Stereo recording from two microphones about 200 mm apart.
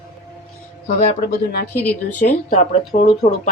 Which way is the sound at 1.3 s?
55° left (ahead or behind).